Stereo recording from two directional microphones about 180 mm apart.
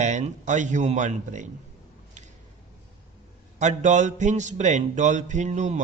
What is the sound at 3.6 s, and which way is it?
A man's voice, 40° right (ahead or behind).